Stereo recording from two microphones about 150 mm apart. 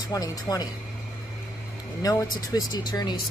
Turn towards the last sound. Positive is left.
turn(degrees=25)  # may be behind; listen again after turning